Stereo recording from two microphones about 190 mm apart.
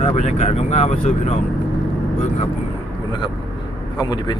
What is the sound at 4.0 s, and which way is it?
Speech, 20° left (ahead or behind).